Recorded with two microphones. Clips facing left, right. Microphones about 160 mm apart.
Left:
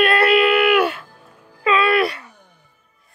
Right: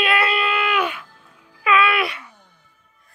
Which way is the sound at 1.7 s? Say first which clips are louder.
Left 2 dB; 35° left (ahead or behind).